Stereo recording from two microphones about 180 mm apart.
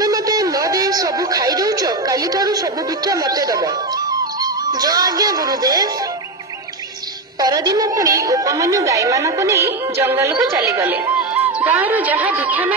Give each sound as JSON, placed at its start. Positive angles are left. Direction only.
{"t": 0.0, "sound": "a sound", "side_deg": -20}
{"t": 3.1, "sound": "speech", "side_deg": -20}
{"t": 7.3, "sound": "a woman's voice", "side_deg": -20}